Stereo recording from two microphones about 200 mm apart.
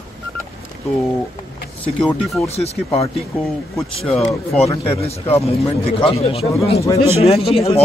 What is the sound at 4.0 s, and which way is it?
Speech, centre (ahead or behind).